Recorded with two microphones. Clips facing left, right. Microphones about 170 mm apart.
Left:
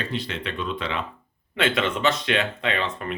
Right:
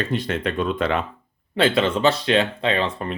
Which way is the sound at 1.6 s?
30° right (ahead or behind).